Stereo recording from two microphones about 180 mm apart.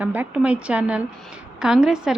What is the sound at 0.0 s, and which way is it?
A woman's voice, 10° right (ahead or behind).